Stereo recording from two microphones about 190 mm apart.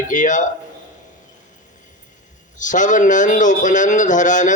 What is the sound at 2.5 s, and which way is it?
A man's voice, 40° left (ahead or behind).